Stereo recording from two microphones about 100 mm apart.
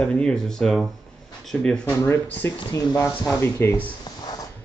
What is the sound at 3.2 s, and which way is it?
Speech, 25° left (ahead or behind).